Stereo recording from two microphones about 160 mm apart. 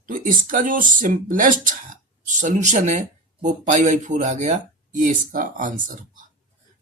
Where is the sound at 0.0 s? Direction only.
55° right (ahead or behind).